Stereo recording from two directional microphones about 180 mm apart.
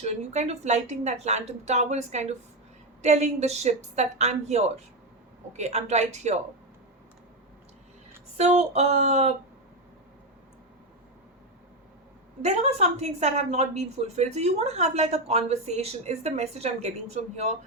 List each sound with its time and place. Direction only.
0.0 s a woman's voice: 40° right (ahead or behind)
8.4 s a woman's voice: 35° right (ahead or behind)
12.4 s a woman's voice: 35° right (ahead or behind)